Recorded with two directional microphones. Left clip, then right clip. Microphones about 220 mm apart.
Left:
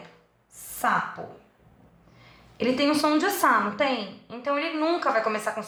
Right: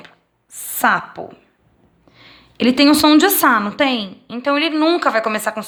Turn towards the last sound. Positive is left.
turn(degrees=-40)  # may be behind; listen again after turning